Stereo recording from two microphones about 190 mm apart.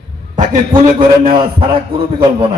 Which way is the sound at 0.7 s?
25° right (ahead or behind).